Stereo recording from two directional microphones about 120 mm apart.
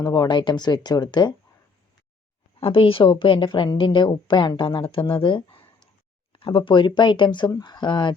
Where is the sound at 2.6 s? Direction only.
50° left (ahead or behind).